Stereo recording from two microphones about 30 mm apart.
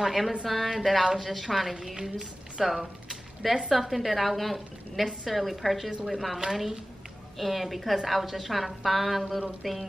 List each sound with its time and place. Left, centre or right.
0.0 s a woman's voice: centre
1.7 s a woman's voice: centre
2.6 s a sound: centre
3.7 s a woman's voice: centre